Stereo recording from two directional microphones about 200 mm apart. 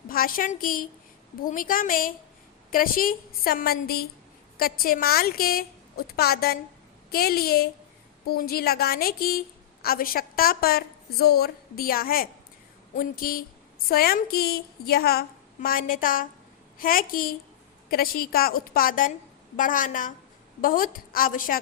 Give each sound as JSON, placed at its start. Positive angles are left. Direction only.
{"t": 0.1, "sound": "a woman's voice", "side_deg": 45}